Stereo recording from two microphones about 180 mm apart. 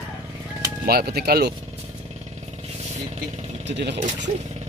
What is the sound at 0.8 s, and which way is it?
Speech, 60° right (ahead or behind).